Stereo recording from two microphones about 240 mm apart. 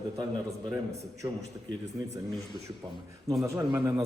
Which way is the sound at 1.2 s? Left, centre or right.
Centre.